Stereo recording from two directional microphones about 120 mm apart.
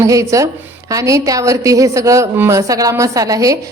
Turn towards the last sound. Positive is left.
turn(degrees=-30)  # may be behind; listen again after turning